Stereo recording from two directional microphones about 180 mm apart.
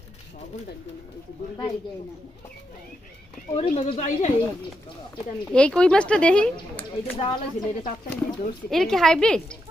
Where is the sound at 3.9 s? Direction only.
45° left (ahead or behind).